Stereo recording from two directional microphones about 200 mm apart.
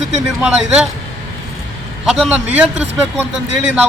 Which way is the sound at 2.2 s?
5° right (ahead or behind).